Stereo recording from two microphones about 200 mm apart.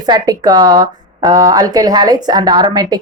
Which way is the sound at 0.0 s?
20° right (ahead or behind).